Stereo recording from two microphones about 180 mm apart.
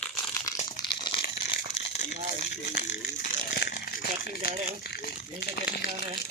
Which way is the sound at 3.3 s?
55° left (ahead or behind).